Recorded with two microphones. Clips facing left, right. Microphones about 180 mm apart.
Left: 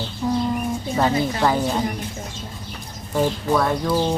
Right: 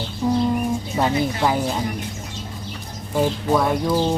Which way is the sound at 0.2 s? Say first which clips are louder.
Right 2 dB; 15° right (ahead or behind).